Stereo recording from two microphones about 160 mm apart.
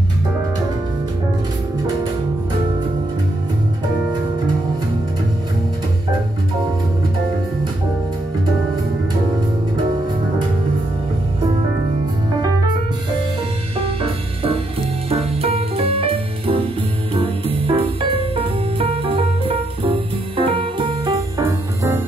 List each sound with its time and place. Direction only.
13.7 s music: 35° right (ahead or behind); by 22.0 s 20° right (ahead or behind)